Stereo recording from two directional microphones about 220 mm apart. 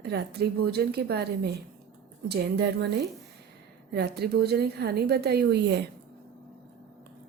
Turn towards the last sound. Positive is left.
turn(degrees=-50)  # may be behind; listen again after turning